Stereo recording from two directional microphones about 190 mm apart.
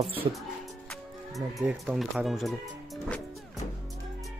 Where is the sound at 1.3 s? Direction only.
5° right (ahead or behind).